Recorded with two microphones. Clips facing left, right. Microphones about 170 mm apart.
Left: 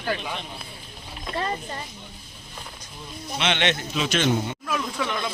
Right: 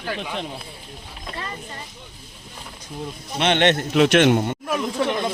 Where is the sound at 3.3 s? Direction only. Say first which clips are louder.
Right 6 dB; 50° right (ahead or behind).